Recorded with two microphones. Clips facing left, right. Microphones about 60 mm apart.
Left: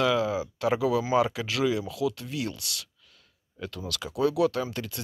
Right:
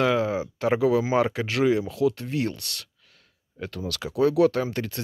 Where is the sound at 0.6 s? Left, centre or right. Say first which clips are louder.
Right 4 dB; right.